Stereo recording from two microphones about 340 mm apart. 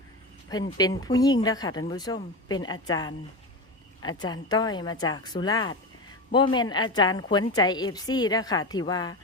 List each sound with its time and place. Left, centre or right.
0.8 s a woman's voice: centre